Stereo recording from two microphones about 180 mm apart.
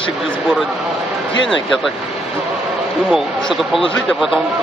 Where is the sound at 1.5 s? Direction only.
Centre (ahead or behind).